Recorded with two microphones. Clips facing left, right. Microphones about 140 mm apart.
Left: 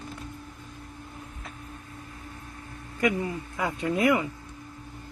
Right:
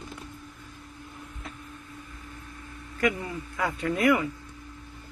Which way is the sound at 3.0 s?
20° left (ahead or behind).